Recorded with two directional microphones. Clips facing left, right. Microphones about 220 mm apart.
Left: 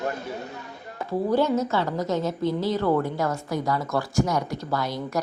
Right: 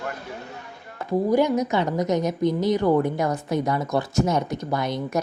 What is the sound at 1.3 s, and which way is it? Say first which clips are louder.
A woman's voice: right 1 dB; 15° right (ahead or behind).